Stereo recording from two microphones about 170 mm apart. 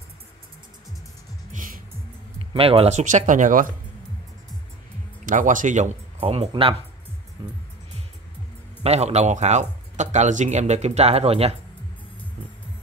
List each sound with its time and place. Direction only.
1.5 s music: 50° right (ahead or behind)
2.3 s speech: 35° right (ahead or behind); by 3.6 s 50° right (ahead or behind)
5.2 s speech: 50° right (ahead or behind); by 6.7 s 35° right (ahead or behind)
8.8 s speech: 40° right (ahead or behind)